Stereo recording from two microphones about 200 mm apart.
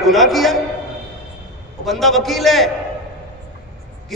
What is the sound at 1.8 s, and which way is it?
Speech, centre (ahead or behind).